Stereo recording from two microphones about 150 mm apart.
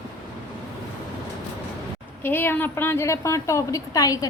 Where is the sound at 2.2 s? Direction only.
15° left (ahead or behind).